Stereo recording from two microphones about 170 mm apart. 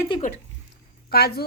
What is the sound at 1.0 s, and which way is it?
Speech, 65° left (ahead or behind).